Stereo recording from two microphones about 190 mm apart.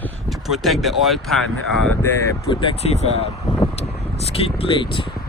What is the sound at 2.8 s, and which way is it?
Speech, 35° left (ahead or behind).